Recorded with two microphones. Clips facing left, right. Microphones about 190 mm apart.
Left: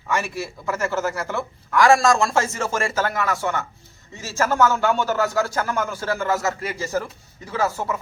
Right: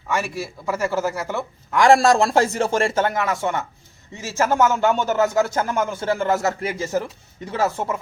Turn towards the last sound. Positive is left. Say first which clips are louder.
# right 1 dB
turn(degrees=-25)  # may be behind; listen again after turning